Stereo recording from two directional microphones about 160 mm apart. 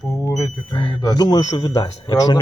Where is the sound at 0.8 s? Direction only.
30° left (ahead or behind).